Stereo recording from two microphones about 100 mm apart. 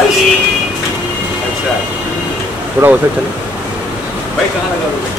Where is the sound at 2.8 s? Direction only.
25° right (ahead or behind).